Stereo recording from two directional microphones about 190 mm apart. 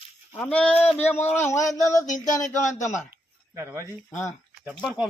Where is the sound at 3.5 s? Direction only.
15° right (ahead or behind).